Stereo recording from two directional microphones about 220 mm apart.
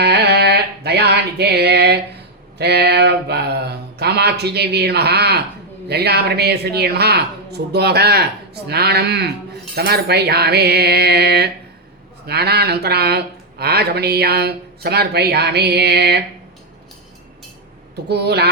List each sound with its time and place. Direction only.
0.0 s a sound: 50° right (ahead or behind)
2.6 s speech: 50° right (ahead or behind)
17.9 s speech: 50° right (ahead or behind)